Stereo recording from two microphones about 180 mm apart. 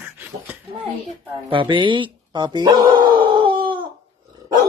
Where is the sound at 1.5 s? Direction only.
30° right (ahead or behind).